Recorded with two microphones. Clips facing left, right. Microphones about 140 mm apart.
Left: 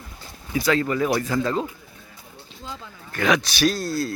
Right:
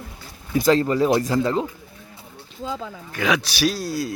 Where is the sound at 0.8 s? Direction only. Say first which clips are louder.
Right 3 dB; 30° right (ahead or behind).